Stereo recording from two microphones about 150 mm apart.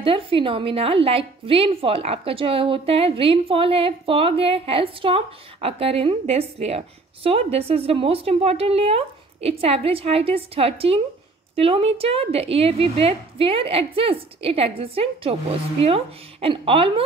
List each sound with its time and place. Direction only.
0.0 s a woman's voice: 35° right (ahead or behind)